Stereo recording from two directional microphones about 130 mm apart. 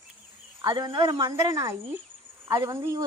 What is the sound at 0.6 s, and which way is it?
Speech, 30° right (ahead or behind).